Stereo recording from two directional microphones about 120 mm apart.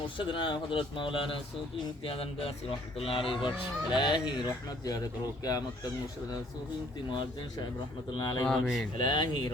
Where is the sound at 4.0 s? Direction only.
40° left (ahead or behind).